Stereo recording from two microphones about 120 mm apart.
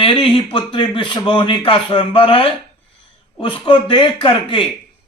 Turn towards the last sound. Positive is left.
turn(degrees=45)  # may be behind; listen again after turning